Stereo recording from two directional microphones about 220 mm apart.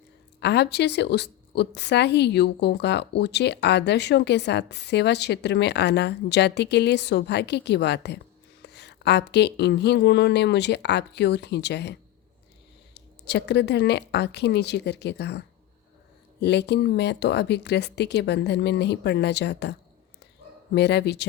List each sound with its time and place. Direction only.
0.3 s a woman's voice: 50° left (ahead or behind)
20.7 s a woman's voice: 50° left (ahead or behind)